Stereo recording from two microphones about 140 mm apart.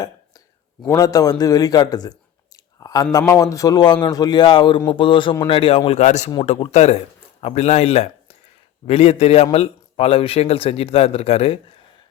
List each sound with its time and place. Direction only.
0.0 s a man's voice: 25° left (ahead or behind); by 11.6 s 45° left (ahead or behind)